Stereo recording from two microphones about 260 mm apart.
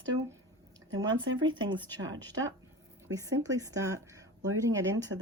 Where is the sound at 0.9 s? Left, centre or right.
Centre.